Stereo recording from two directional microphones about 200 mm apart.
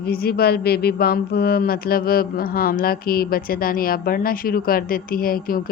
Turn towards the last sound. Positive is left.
turn(degrees=45)  # may be behind; listen again after turning